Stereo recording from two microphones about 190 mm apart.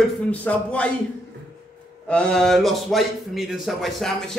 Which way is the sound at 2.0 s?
5° left (ahead or behind).